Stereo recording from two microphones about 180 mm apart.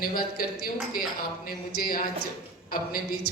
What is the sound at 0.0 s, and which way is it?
Speech, 55° left (ahead or behind).